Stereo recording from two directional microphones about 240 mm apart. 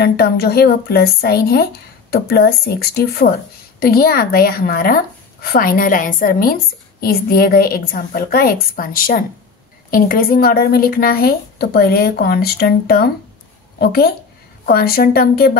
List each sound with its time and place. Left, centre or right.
0.0 s speech: left